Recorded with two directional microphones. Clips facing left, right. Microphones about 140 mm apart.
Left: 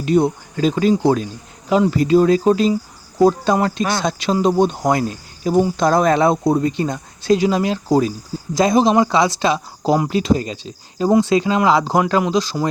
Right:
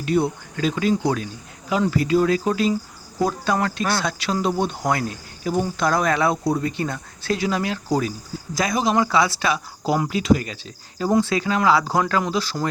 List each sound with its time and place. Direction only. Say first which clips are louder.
0.0 s speech: left 5 dB; 25° left (ahead or behind)